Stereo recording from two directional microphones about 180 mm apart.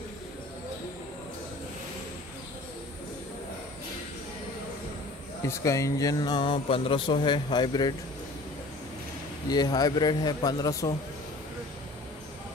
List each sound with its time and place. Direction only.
5.4 s music: 15° left (ahead or behind)
9.5 s music: 20° left (ahead or behind)